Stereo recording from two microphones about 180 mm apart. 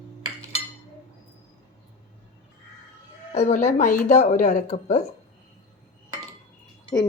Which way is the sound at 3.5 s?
40° left (ahead or behind).